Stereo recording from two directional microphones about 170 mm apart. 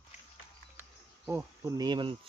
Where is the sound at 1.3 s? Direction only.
15° right (ahead or behind).